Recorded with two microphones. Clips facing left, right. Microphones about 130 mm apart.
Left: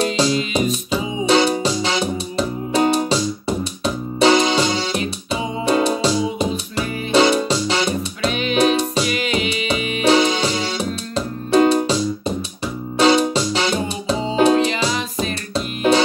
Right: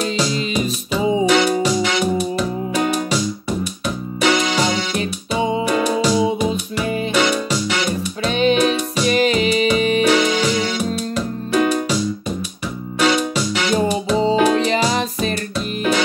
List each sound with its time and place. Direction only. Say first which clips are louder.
0.0 s music: left 2 dB; 30° left (ahead or behind)
8.3 s music: right 8 dB; 35° right (ahead or behind)
8.5 s music: left 1 dB; 30° left (ahead or behind)
9.0 s music: right 5 dB; 35° right (ahead or behind)
10.0 s music: even; 30° left (ahead or behind)
13.0 s music: left 3 dB; 30° left (ahead or behind)